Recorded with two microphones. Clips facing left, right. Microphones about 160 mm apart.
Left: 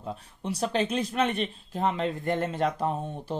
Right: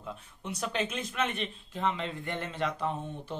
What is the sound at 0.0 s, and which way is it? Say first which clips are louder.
Speech: left 6 dB; 35° left (ahead or behind).